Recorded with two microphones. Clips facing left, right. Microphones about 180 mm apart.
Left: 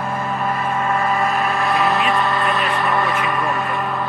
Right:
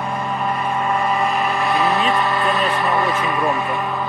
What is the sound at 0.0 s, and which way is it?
Vehicle, centre (ahead or behind).